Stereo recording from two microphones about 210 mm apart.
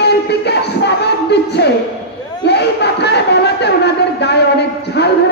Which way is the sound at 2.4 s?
55° left (ahead or behind).